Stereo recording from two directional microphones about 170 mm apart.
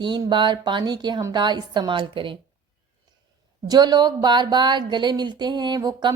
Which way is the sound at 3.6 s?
25° right (ahead or behind).